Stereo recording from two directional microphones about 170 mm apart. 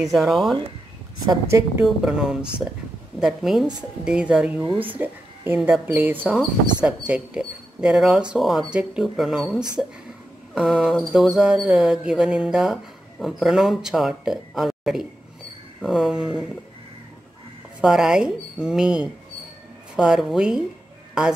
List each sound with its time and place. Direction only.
0.0 s speech: centre (ahead or behind)
1.2 s a woman's voice: 20° right (ahead or behind)
1.9 s speech: 5° right (ahead or behind)
17.7 s speech: 5° right (ahead or behind)